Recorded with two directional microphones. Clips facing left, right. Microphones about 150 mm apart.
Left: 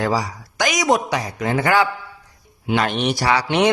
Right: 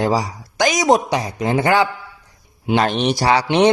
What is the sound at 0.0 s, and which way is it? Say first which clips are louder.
Speech: right 2 dB; 25° right (ahead or behind).